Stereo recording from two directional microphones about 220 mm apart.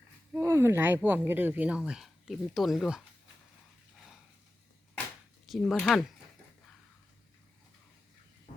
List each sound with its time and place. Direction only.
0.3 s speech: 10° right (ahead or behind)
5.5 s speech: centre (ahead or behind)
8.5 s duck: 35° left (ahead or behind)